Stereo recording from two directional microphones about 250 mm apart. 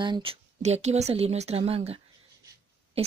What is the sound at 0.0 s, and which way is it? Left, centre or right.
Speech, centre.